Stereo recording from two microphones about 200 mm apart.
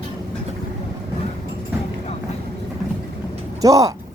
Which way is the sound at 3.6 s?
15° right (ahead or behind).